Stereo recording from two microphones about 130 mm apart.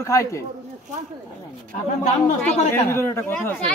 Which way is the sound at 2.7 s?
20° left (ahead or behind).